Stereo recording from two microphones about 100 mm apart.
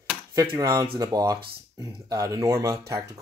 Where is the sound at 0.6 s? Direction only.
35° right (ahead or behind).